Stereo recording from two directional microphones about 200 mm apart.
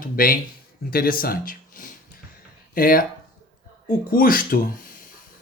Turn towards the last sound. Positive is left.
turn(degrees=45)  # may be behind; listen again after turning